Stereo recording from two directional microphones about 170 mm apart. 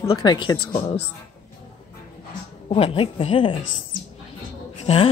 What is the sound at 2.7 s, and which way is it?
Speech, 35° left (ahead or behind).